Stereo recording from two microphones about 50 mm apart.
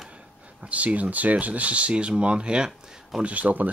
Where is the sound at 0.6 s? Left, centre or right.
Right.